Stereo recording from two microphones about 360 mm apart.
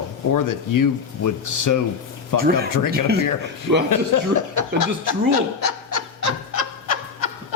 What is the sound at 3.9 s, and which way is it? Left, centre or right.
Speech, left.